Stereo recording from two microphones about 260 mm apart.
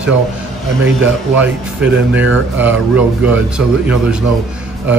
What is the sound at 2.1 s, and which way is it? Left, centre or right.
Speech, right.